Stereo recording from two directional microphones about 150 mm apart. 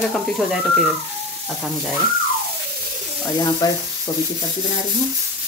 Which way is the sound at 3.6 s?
25° left (ahead or behind).